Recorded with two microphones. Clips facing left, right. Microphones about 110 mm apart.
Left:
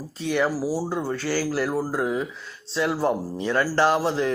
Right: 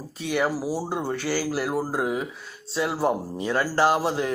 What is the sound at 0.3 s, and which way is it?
Speech, 15° right (ahead or behind).